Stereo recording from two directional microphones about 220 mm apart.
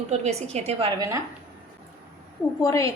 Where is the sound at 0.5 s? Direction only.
25° right (ahead or behind).